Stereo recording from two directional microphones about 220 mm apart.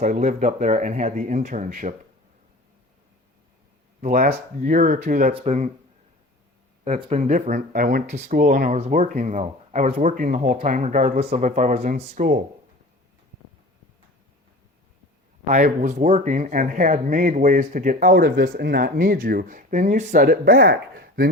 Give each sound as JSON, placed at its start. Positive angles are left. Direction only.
{"t": 0.0, "sound": "speech", "side_deg": -35}
{"t": 4.0, "sound": "speech", "side_deg": -40}
{"t": 6.8, "sound": "speech", "side_deg": -30}
{"t": 15.4, "sound": "speech", "side_deg": -35}